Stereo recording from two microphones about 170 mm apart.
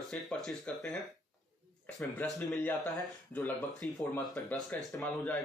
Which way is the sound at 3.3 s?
5° left (ahead or behind).